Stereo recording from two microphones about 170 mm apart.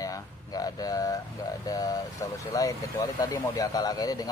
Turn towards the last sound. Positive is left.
turn(degrees=20)  # may be behind; listen again after turning